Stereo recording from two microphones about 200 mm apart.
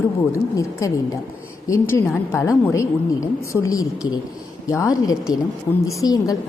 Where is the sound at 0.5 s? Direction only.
15° left (ahead or behind).